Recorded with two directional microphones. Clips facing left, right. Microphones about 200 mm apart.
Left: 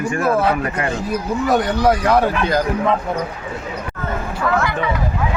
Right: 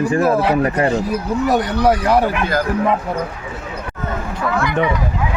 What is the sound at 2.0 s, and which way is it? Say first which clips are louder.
Speech: even; 10° right (ahead or behind).